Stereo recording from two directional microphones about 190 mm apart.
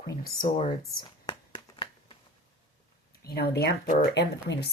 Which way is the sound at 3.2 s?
55° left (ahead or behind).